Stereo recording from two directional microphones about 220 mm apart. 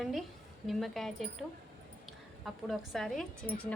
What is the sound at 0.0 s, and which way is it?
A woman's voice, centre (ahead or behind).